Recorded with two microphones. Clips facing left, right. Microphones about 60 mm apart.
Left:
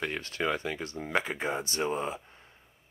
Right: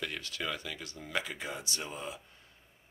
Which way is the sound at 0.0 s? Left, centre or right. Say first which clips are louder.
Left 6 dB; left.